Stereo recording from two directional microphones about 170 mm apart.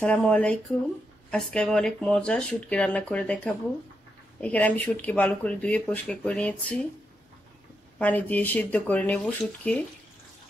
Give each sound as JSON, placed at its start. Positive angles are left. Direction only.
{"t": 0.0, "sound": "speech", "side_deg": 5}
{"t": 8.0, "sound": "speech", "side_deg": 10}